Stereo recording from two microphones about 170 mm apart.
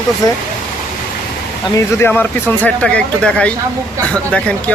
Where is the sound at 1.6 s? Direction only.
15° left (ahead or behind).